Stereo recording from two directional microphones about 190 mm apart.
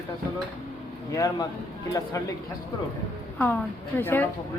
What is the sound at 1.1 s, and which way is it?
A man's voice, 20° left (ahead or behind).